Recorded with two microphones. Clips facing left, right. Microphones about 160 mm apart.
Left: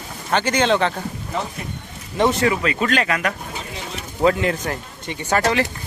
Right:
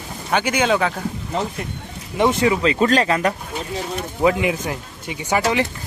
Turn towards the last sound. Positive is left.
turn(degrees=-15)  # may be behind; listen again after turning